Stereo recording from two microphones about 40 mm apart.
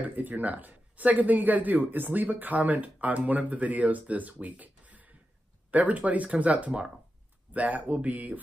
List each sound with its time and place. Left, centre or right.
0.0 s speech: right